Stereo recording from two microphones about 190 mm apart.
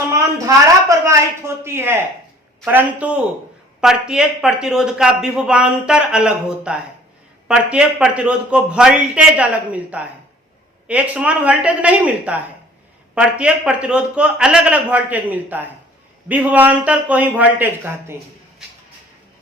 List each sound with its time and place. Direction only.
0.1 s a man's voice: 15° right (ahead or behind)